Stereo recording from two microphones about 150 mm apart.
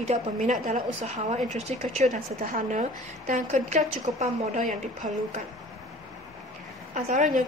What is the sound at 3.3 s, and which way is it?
A woman's voice, 50° right (ahead or behind).